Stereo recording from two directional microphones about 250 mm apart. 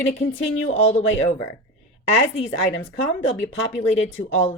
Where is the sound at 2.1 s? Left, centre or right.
Left.